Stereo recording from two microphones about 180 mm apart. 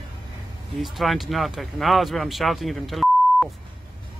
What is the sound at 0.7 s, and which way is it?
A man's voice, centre (ahead or behind).